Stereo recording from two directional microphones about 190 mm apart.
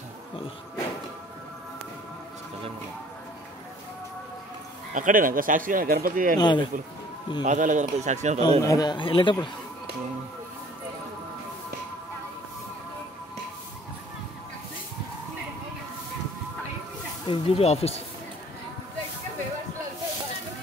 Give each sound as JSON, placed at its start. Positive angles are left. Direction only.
{"t": 4.9, "sound": "a man's voice", "side_deg": -45}
{"t": 6.3, "sound": "a man's voice", "side_deg": 25}
{"t": 7.4, "sound": "a man's voice", "side_deg": -40}
{"t": 8.5, "sound": "a man's voice", "side_deg": 20}
{"t": 17.3, "sound": "speech", "side_deg": 30}